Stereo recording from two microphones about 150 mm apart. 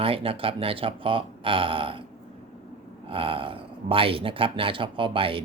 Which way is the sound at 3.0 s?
35° right (ahead or behind).